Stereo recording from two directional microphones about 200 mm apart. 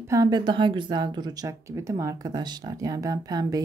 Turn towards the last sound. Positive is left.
turn(degrees=-20)  # may be behind; listen again after turning